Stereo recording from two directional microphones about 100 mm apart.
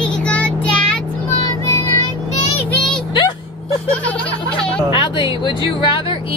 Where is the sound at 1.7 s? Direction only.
35° left (ahead or behind).